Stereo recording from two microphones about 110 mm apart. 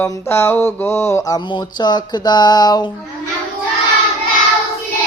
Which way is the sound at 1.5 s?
40° left (ahead or behind).